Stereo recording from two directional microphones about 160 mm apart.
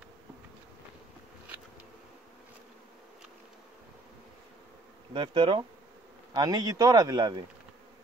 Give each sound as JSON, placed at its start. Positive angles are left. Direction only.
{"t": 5.1, "sound": "speech", "side_deg": -30}